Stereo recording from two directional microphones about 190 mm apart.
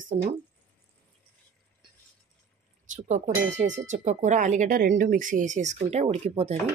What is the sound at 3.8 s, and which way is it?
Speech, 40° right (ahead or behind).